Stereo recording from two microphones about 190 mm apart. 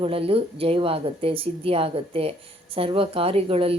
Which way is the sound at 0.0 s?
30° right (ahead or behind).